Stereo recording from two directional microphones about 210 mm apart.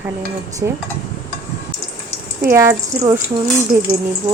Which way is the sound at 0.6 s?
15° right (ahead or behind).